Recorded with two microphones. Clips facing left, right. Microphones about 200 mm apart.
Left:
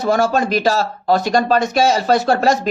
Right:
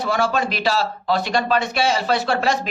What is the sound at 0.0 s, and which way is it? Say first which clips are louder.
Speech: left 5 dB; 45° left (ahead or behind).